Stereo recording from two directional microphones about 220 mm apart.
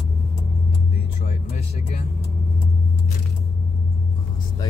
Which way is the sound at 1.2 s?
30° left (ahead or behind).